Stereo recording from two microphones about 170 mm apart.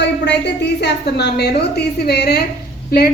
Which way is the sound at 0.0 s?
85° left.